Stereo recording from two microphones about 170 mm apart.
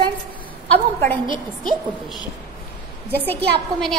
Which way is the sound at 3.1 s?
10° left (ahead or behind).